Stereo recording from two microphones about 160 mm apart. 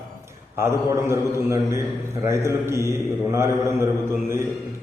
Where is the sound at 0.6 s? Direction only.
15° right (ahead or behind).